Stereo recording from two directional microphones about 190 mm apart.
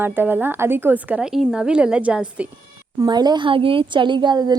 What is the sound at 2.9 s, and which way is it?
A woman's voice, 20° right (ahead or behind).